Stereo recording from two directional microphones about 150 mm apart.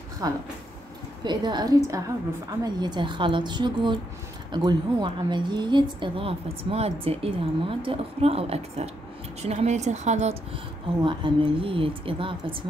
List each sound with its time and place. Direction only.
0.2 s a woman's voice: 25° right (ahead or behind); by 10.3 s 50° right (ahead or behind)
11.1 s a woman's voice: 35° right (ahead or behind)